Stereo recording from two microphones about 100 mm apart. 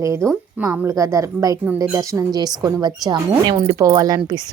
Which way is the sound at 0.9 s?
30° right (ahead or behind).